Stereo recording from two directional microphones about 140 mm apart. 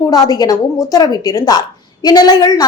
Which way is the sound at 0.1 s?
25° left (ahead or behind).